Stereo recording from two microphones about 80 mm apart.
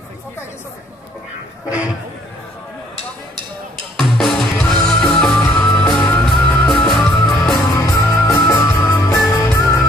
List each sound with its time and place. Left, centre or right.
3.9 s music: centre
7.6 s music: left